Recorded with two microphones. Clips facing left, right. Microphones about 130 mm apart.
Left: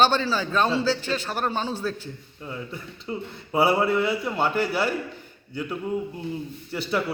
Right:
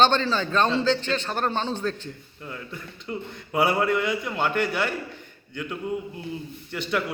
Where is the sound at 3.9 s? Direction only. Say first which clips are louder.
Left 1 dB; 35° left (ahead or behind).